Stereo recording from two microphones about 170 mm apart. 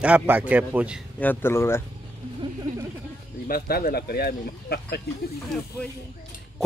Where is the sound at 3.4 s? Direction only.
60° left (ahead or behind).